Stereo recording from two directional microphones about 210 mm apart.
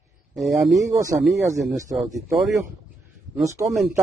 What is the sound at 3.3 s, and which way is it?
Speech, 15° right (ahead or behind).